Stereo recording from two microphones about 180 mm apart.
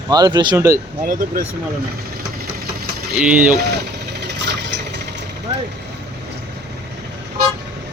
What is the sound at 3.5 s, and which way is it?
Engine, 65° right (ahead or behind).